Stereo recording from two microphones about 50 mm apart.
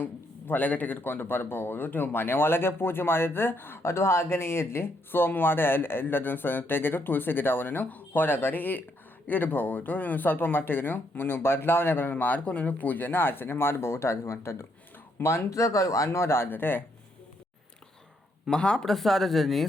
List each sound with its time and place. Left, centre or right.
0.0 s speech: left
12.2 s speech: left
15.2 s speech: left
18.5 s speech: centre
18.9 s speech: centre